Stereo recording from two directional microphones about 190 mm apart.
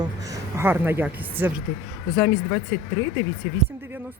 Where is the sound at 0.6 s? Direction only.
10° right (ahead or behind).